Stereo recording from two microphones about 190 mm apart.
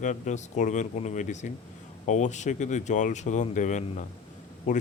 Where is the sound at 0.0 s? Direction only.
40° left (ahead or behind).